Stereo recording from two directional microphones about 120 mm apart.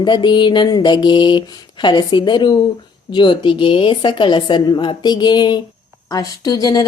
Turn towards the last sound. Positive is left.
turn(degrees=35)  # may be behind; listen again after turning